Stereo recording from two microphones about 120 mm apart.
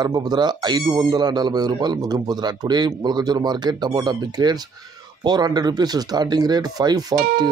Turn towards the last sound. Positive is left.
turn(degrees=-35)  # may be behind; listen again after turning